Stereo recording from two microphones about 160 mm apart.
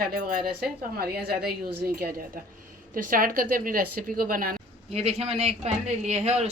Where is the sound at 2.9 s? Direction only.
60° right (ahead or behind).